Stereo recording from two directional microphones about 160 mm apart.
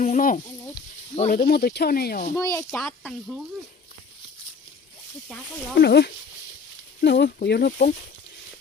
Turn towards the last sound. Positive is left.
turn(degrees=70)  # may be behind; listen again after turning